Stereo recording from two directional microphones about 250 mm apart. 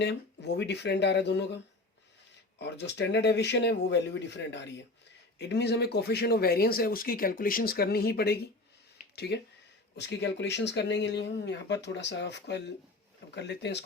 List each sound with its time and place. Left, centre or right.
0.0 s speech: left
2.6 s speech: left